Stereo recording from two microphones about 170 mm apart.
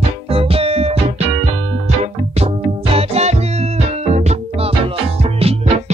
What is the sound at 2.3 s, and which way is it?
Music, 35° right (ahead or behind).